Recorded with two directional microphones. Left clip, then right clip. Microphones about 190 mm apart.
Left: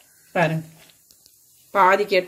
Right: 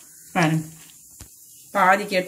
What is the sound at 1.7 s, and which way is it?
Speech, 50° left (ahead or behind).